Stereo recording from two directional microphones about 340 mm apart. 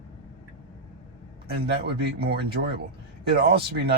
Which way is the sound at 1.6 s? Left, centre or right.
Right.